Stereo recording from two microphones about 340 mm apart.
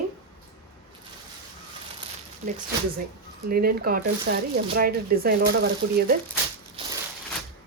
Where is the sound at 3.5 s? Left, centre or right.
Right.